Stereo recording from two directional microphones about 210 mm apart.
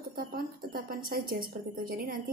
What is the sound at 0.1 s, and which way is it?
A woman's voice, 45° right (ahead or behind).